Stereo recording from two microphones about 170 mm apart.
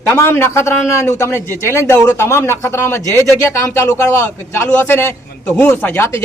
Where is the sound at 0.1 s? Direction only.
15° left (ahead or behind).